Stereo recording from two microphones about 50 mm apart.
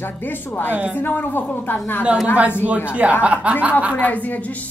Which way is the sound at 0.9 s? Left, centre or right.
Left.